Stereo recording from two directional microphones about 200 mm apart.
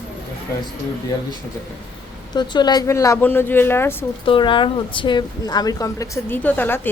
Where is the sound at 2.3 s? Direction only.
20° left (ahead or behind).